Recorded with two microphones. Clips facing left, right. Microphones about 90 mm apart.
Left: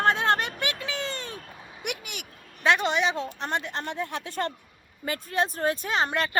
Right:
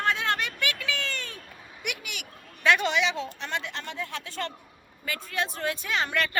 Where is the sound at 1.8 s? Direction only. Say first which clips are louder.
Left 1 dB; 45° left (ahead or behind).